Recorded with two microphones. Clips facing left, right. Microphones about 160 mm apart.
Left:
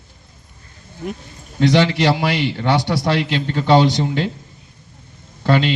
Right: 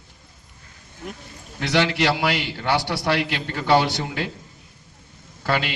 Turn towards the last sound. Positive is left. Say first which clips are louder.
# left 7 dB
turn(degrees=25)  # may be behind; listen again after turning